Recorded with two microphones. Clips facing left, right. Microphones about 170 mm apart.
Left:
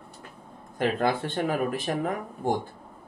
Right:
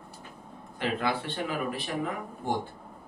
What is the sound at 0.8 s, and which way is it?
Speech, 45° left (ahead or behind).